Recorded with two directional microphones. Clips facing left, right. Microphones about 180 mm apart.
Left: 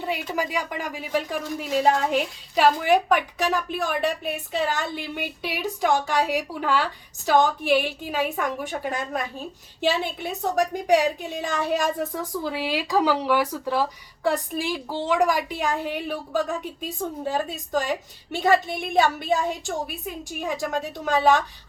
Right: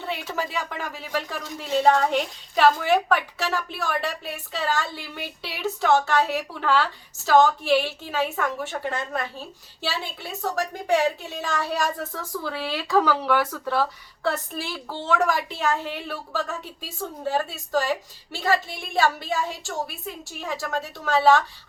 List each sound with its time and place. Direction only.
0.0 s a woman's voice: 10° left (ahead or behind)